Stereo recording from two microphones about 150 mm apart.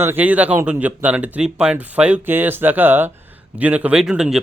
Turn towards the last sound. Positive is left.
turn(degrees=-5)  # may be behind; listen again after turning